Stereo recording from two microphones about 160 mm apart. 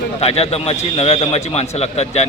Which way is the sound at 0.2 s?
40° left (ahead or behind).